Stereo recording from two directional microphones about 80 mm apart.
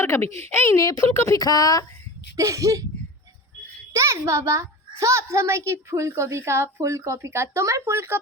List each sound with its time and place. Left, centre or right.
0.0 s speech: left
2.3 s speech: right
3.9 s a child's voice: right